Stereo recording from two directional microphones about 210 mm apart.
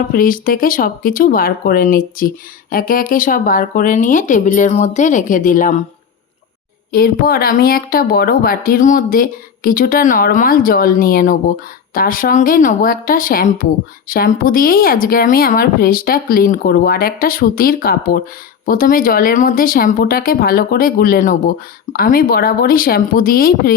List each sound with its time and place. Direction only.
0.1 s speech: 40° left (ahead or behind)
6.9 s speech: 45° left (ahead or behind)